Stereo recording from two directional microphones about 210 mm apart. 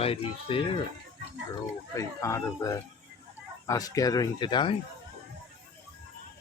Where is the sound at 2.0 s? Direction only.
15° left (ahead or behind).